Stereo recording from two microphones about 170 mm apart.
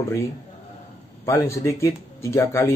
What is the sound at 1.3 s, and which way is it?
A man's voice, 15° left (ahead or behind).